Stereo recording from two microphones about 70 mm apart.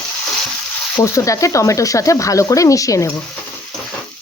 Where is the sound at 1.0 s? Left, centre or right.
Left.